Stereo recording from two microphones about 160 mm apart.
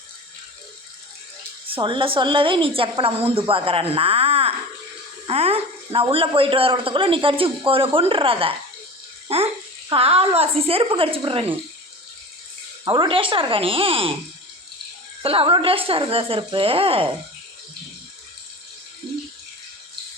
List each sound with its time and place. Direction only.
1.6 s a man's voice: 30° right (ahead or behind)
12.8 s a man's voice: 30° right (ahead or behind)
15.2 s a man's voice: 35° right (ahead or behind)